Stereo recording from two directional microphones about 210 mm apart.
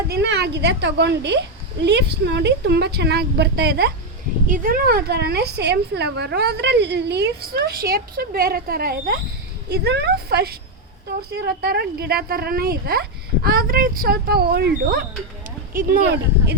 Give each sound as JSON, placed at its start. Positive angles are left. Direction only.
{"t": 0.1, "sound": "a woman's voice", "side_deg": -55}